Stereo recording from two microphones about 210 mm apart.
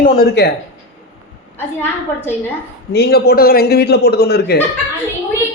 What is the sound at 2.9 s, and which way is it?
A man's voice, 50° left (ahead or behind).